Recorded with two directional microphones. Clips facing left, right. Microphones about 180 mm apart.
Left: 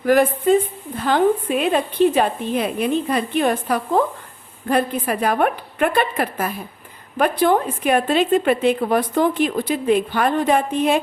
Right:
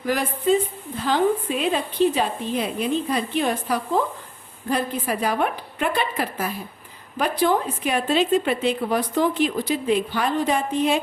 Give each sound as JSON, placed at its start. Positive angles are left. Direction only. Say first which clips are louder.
{"t": 0.0, "sound": "a woman's voice", "louder": "left 7 dB", "side_deg": 55}